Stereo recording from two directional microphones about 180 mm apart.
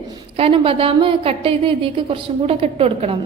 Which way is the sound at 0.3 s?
30° right (ahead or behind).